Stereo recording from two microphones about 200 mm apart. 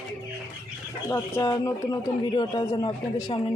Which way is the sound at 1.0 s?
15° left (ahead or behind).